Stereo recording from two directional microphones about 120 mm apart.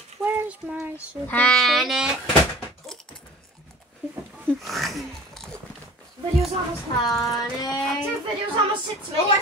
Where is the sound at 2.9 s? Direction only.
5° left (ahead or behind).